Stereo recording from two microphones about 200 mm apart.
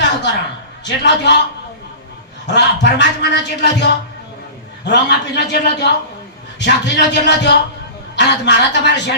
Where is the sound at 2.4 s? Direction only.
60° left (ahead or behind).